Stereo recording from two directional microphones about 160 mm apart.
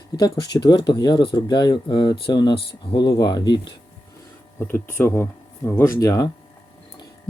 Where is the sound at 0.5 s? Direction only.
30° left (ahead or behind).